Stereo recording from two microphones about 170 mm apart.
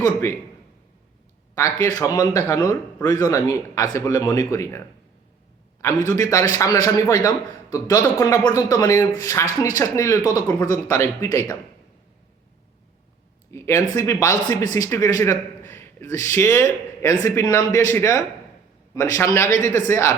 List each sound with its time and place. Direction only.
0.0 s a man's voice: 15° left (ahead or behind)
1.5 s a man's voice: 15° left (ahead or behind)
6.1 s a man's voice: 20° left (ahead or behind)
13.5 s a man's voice: 15° left (ahead or behind)